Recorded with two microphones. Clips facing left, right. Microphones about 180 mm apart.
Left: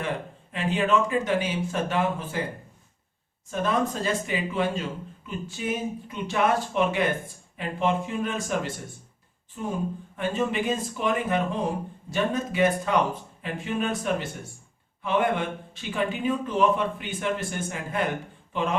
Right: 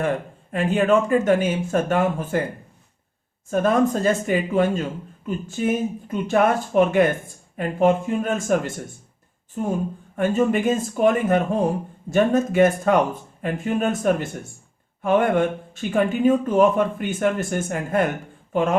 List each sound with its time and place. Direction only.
0.5 s speech: 50° right (ahead or behind)
3.5 s speech: 50° right (ahead or behind)